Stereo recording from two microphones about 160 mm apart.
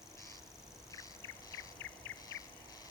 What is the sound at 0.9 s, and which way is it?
Insect, 20° left (ahead or behind).